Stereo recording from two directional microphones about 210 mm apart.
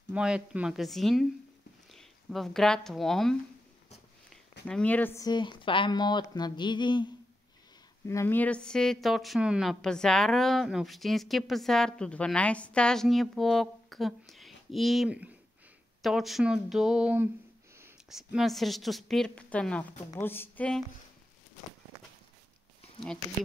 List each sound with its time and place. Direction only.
0.1 s a woman's voice: 5° right (ahead or behind)
4.6 s speech: 5° left (ahead or behind); by 7.1 s 20° left (ahead or behind)
8.1 s a woman's voice: 10° left (ahead or behind)